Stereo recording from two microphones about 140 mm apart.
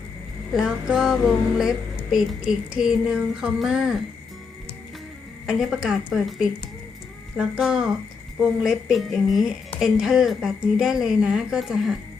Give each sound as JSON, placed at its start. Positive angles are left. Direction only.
{"t": 0.5, "sound": "speech", "side_deg": -5}
{"t": 5.5, "sound": "speech", "side_deg": -5}